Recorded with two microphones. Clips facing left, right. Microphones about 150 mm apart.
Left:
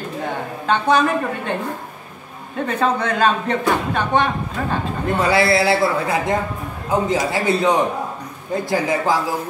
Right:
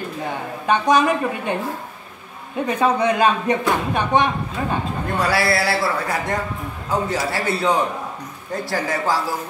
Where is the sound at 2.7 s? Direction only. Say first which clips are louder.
Right 2 dB; 15° right (ahead or behind).